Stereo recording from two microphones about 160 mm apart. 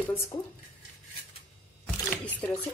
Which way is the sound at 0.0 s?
15° left (ahead or behind).